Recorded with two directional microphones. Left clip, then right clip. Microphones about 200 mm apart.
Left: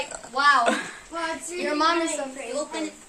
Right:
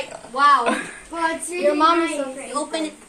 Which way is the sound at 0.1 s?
15° left (ahead or behind).